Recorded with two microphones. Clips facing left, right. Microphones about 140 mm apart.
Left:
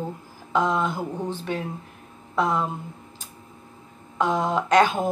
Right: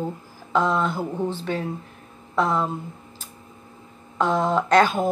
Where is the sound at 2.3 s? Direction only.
10° left (ahead or behind).